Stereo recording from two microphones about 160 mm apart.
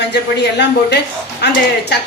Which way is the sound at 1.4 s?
90° left.